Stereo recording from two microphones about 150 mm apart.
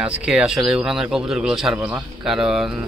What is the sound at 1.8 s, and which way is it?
Speech, 15° right (ahead or behind).